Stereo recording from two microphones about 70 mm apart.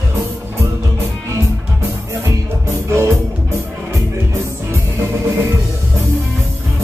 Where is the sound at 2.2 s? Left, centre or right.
Right.